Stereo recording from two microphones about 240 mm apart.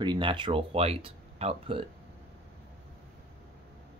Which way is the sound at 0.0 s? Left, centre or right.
Centre.